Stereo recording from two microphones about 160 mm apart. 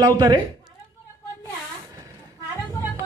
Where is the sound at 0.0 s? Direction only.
30° right (ahead or behind).